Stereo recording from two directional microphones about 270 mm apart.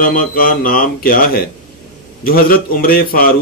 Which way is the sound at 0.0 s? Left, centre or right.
Left.